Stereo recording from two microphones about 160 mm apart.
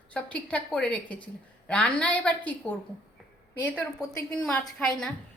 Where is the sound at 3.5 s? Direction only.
10° left (ahead or behind).